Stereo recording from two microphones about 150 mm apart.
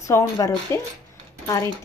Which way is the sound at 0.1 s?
20° left (ahead or behind).